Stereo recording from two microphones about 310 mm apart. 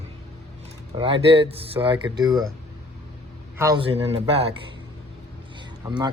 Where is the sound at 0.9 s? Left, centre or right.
Centre.